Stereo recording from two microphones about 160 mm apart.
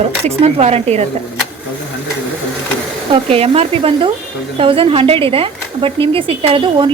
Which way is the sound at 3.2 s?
40° right (ahead or behind).